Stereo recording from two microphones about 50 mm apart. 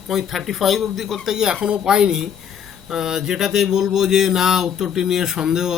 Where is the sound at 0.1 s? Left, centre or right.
Centre.